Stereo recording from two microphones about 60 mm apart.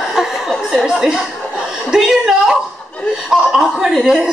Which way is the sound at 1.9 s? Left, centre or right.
Centre.